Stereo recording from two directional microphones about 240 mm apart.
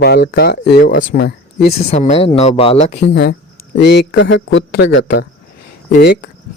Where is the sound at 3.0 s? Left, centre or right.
Left.